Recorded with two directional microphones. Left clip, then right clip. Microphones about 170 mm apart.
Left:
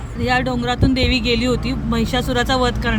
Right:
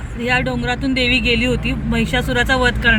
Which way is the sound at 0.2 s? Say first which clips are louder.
Even; 10° left (ahead or behind).